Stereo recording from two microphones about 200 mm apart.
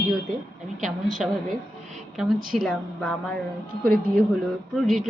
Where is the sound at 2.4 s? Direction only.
Centre (ahead or behind).